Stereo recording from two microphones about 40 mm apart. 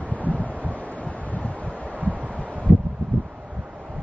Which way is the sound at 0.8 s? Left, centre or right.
Left.